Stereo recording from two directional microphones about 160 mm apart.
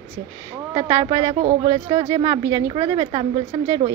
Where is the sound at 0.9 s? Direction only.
20° right (ahead or behind).